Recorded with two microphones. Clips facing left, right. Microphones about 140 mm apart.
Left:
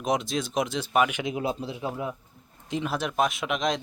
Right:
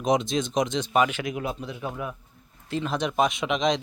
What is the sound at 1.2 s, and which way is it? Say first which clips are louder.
A man's voice: left 1 dB; 25° left (ahead or behind).